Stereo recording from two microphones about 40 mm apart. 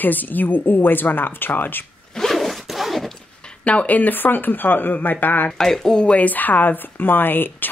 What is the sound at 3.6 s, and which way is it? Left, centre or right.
Speech, left.